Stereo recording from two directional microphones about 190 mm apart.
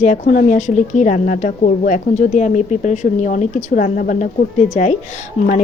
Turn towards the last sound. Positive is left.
turn(degrees=35)  # may be behind; listen again after turning